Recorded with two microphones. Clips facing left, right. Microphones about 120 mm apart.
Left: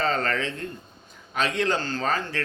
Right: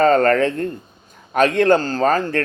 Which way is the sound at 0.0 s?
50° right (ahead or behind).